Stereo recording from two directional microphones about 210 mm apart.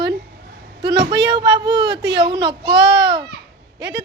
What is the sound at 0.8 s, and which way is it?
A woman's voice, 55° right (ahead or behind).